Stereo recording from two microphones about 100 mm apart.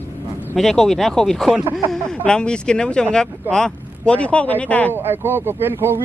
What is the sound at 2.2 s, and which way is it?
Speech, 10° left (ahead or behind).